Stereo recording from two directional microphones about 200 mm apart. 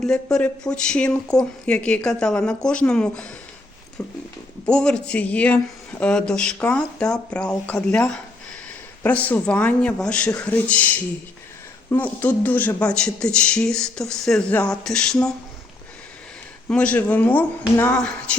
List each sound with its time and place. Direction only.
0.0 s speech: 5° left (ahead or behind)
4.0 s a man's voice: 15° left (ahead or behind)
4.6 s a man's voice: 5° left (ahead or behind)
16.6 s a man's voice: 5° left (ahead or behind)